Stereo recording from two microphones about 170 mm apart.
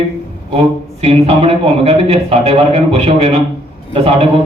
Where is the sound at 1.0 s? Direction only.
35° right (ahead or behind).